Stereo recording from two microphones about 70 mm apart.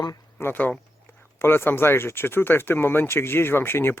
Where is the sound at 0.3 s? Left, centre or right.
Left.